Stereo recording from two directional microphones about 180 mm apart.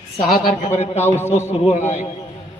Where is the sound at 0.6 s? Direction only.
35° left (ahead or behind).